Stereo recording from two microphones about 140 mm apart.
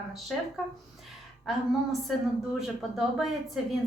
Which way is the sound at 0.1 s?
Centre (ahead or behind).